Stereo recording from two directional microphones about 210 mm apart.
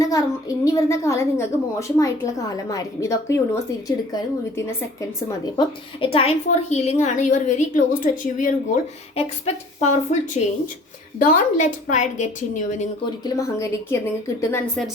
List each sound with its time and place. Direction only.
0.0 s a woman's voice: 15° left (ahead or behind)
5.5 s a woman's voice: 25° left (ahead or behind)
13.2 s a woman's voice: 15° left (ahead or behind)